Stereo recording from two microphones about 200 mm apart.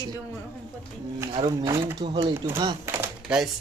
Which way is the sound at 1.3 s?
25° right (ahead or behind).